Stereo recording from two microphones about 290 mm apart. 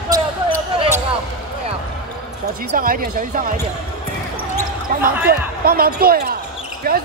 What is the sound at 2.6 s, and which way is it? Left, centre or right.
Speech, right.